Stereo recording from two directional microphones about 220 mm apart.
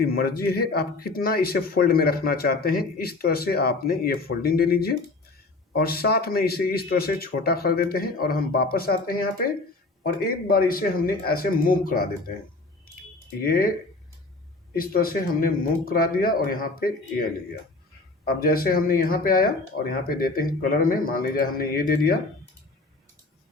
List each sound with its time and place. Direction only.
0.0 s speech: 40° left (ahead or behind)
13.4 s speech: 40° left (ahead or behind)
14.8 s speech: 40° left (ahead or behind)
18.3 s speech: 40° left (ahead or behind)